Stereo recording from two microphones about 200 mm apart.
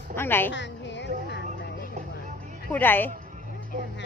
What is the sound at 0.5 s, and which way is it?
Music, 60° left (ahead or behind).